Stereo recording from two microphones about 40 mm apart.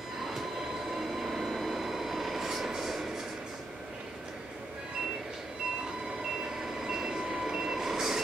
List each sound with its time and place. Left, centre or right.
0.9 s train: centre
6.9 s reversing beeps: centre